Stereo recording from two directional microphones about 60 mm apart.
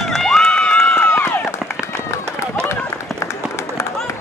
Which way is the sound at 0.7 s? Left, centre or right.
Left.